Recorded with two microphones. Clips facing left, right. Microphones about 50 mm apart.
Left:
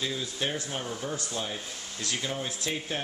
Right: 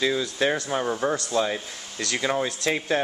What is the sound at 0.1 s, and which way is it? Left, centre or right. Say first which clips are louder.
Speech: right 8 dB; right.